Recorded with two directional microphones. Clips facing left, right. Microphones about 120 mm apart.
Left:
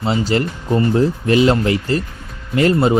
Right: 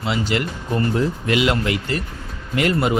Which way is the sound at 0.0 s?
35° left (ahead or behind).